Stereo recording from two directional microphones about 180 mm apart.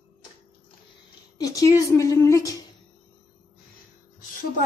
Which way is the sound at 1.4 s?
20° left (ahead or behind).